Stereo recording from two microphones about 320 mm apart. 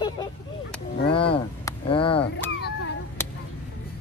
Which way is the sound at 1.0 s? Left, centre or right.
Centre.